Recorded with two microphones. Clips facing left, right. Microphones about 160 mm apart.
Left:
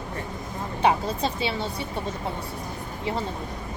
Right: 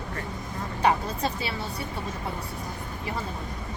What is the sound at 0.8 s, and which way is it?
Speech, 25° left (ahead or behind).